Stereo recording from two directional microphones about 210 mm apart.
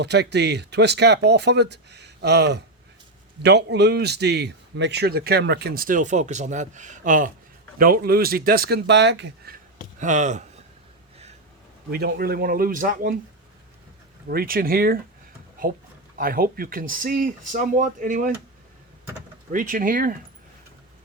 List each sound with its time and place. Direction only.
0.0 s a man's voice: 55° right (ahead or behind)
10.0 s speech: 35° right (ahead or behind)
11.9 s a man's voice: 50° right (ahead or behind)
14.3 s a man's voice: 45° right (ahead or behind)
16.1 s speech: 45° right (ahead or behind)
19.5 s speech: 40° right (ahead or behind)